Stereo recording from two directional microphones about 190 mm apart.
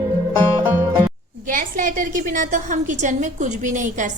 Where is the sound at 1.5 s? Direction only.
45° right (ahead or behind).